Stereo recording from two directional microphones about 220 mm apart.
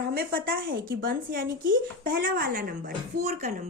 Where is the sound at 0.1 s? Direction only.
45° right (ahead or behind).